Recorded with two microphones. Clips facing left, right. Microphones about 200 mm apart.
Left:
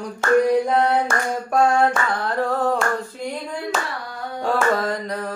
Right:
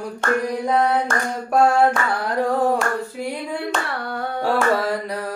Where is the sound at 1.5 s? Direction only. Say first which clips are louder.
Right 2 dB; 5° right (ahead or behind).